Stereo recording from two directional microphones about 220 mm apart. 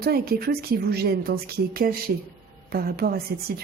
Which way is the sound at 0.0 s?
45° right (ahead or behind).